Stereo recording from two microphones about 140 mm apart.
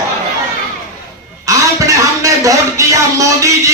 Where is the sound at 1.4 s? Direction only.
20° right (ahead or behind).